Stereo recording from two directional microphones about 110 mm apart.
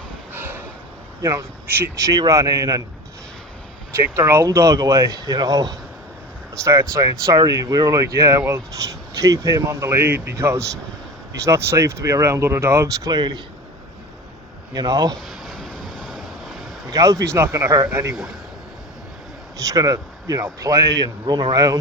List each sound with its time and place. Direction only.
0.3 s a sound: 15° right (ahead or behind)
1.2 s speech: 25° right (ahead or behind)
3.9 s speech: 20° right (ahead or behind)
13.1 s speech: 40° right (ahead or behind)
14.7 s speech: 35° right (ahead or behind)
15.1 s a sound: 5° left (ahead or behind)
16.9 s speech: 30° right (ahead or behind)
19.5 s speech: 30° right (ahead or behind)